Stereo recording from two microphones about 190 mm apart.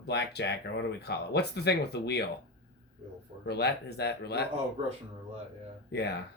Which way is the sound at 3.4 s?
60° left (ahead or behind).